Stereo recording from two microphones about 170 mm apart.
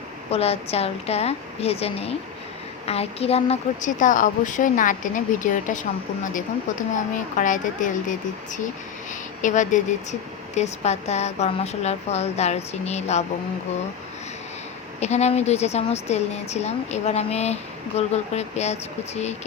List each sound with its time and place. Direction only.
0.3 s a woman's voice: 35° left (ahead or behind)
7.3 s a woman's voice: 50° left (ahead or behind)
9.4 s a woman's voice: 45° left (ahead or behind)
15.0 s a woman's voice: 40° left (ahead or behind)